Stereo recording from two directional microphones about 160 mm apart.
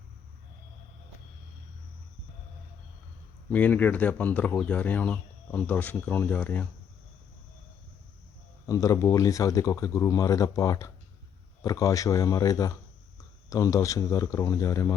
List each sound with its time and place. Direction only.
3.5 s speech: 10° left (ahead or behind)
8.6 s speech: 20° left (ahead or behind)